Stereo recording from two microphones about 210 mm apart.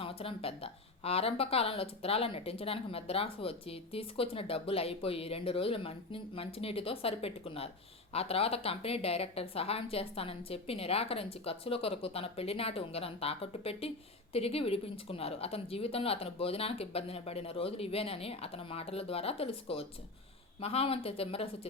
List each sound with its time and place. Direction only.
0.0 s speech: 25° left (ahead or behind)